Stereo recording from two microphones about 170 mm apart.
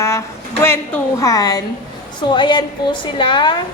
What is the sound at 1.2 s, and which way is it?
A woman's voice, 20° left (ahead or behind).